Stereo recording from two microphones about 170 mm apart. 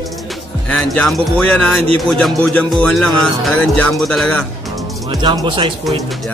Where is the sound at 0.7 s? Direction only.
5° left (ahead or behind).